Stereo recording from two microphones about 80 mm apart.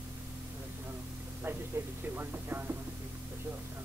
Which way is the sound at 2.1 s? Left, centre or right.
Right.